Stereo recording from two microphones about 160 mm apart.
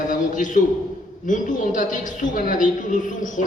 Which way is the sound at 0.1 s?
55° left (ahead or behind).